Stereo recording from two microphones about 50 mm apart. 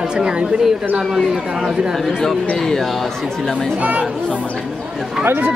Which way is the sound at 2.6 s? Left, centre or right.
Centre.